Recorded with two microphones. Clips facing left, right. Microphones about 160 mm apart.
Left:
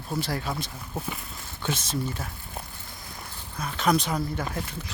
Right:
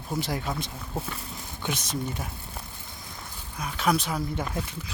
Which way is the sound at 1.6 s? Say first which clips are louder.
Left 2 dB; 15° right (ahead or behind).